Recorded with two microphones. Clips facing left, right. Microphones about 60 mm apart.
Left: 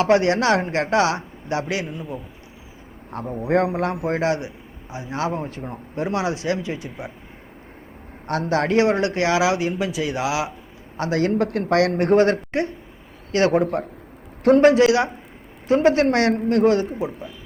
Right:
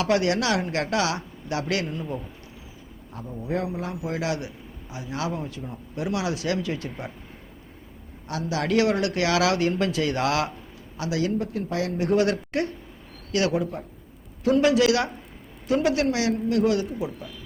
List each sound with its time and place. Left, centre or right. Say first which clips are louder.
0.0 s a man's voice: left 5 dB; left
1.6 s a man's voice: left 1 dB; centre
3.1 s a man's voice: left 8 dB; left; by 7.1 s centre
8.3 s a man's voice: left 5 dB; left; by 10.5 s centre
10.9 s a man's voice: left 5 dB; left
11.3 s speech: left 8 dB; left
12.1 s a man's voice: left 5 dB; left
13.5 s a man's voice: left 7 dB; left
14.7 s a man's voice: left 4 dB; left
16.6 s a man's voice: left 6 dB; left